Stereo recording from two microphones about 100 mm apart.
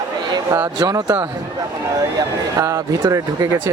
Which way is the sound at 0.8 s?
40° right (ahead or behind).